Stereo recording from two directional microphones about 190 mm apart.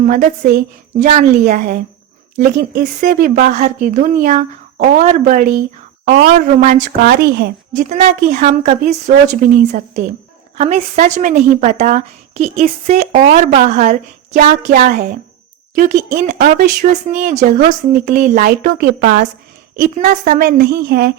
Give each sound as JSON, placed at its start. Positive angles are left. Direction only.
{"t": 0.0, "sound": "speech", "side_deg": -45}
{"t": 7.0, "sound": "speech", "side_deg": -60}
{"t": 7.7, "sound": "a woman's voice", "side_deg": -40}
{"t": 20.6, "sound": "speech", "side_deg": -55}